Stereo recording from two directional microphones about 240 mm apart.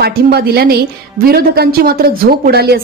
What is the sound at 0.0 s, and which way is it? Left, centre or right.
A woman's voice, right.